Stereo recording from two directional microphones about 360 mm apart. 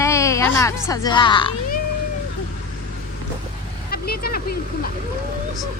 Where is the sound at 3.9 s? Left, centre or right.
Left.